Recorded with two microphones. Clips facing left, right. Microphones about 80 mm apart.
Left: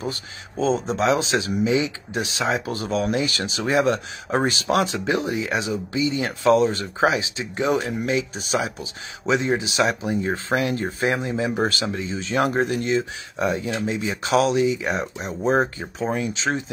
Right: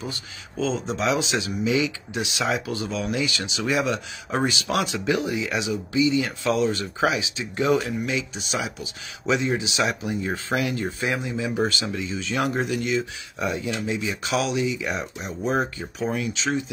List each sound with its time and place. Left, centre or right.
0.6 s speech: left
2.7 s speech: left
8.0 s speech: left